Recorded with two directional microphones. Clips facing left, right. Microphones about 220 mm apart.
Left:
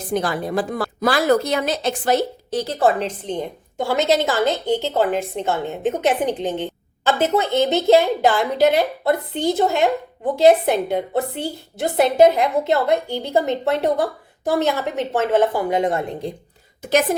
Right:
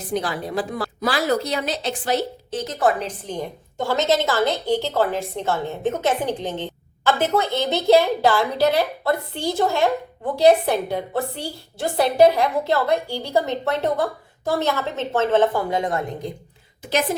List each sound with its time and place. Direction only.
0.1 s a woman's voice: 50° left (ahead or behind); by 3.4 s 25° left (ahead or behind)
3.8 s a woman's voice: 10° left (ahead or behind)